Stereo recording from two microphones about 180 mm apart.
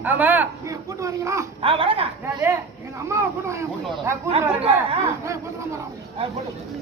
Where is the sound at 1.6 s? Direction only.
30° right (ahead or behind).